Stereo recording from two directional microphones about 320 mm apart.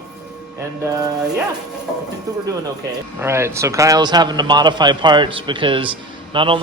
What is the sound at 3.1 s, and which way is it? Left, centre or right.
A man's voice, centre.